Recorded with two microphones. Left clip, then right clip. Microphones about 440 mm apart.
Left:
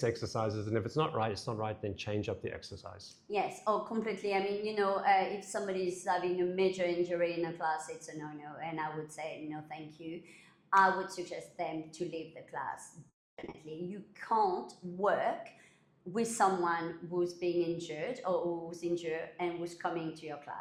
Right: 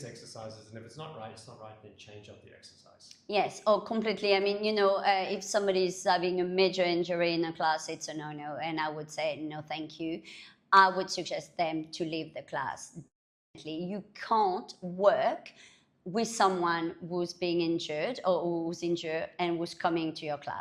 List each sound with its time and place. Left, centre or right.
0.0 s speech: left
3.2 s a woman's voice: right
13.9 s a woman's voice: right